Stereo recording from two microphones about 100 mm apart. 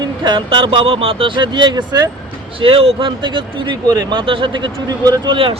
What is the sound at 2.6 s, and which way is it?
Speech, 65° right (ahead or behind).